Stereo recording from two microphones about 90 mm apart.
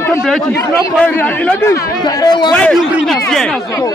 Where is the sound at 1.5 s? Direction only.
35° left (ahead or behind).